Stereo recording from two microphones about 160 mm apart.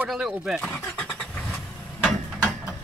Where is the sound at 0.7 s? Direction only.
10° left (ahead or behind).